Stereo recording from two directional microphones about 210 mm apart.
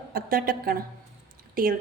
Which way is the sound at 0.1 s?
45° right (ahead or behind).